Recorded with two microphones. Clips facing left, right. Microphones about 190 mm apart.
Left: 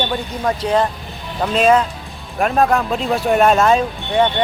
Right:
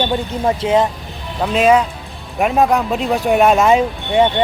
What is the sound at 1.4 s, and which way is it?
Speech, 5° right (ahead or behind).